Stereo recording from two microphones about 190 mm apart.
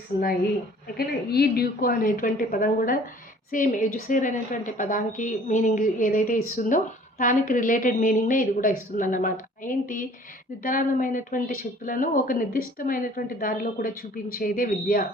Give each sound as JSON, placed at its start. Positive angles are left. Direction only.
{"t": 0.9, "sound": "a woman's voice", "side_deg": 55}